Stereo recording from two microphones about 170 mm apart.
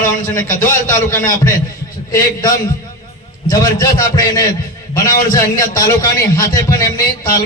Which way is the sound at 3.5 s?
20° left (ahead or behind).